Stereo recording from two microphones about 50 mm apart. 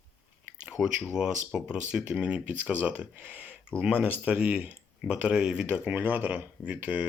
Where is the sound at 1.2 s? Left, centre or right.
Centre.